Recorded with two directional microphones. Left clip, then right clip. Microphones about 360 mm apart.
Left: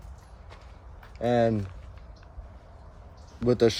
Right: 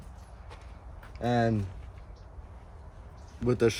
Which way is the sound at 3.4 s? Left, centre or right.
Left.